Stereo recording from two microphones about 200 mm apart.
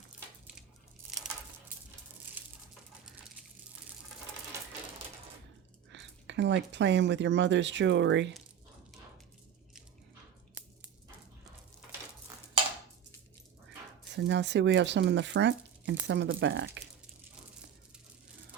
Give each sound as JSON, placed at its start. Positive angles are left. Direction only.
{"t": 1.1, "sound": "a sound", "side_deg": 0}
{"t": 5.9, "sound": "speech", "side_deg": -65}
{"t": 13.7, "sound": "speech", "side_deg": -60}